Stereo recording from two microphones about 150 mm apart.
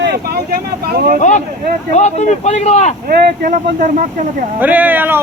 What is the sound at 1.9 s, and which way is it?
Speech, 50° left (ahead or behind).